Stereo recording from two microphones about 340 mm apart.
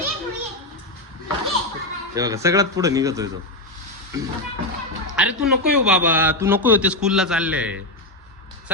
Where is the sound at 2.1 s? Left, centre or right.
Centre.